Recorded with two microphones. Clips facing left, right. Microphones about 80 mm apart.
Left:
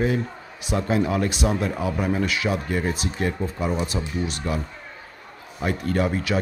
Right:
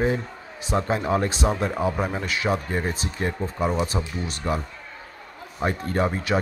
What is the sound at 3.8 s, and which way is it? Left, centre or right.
Speech, right.